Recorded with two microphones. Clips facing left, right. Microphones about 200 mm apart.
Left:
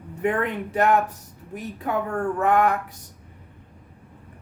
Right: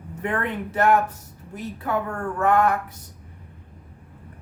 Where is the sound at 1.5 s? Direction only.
15° left (ahead or behind).